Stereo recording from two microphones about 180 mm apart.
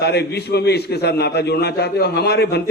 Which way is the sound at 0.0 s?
65° left (ahead or behind).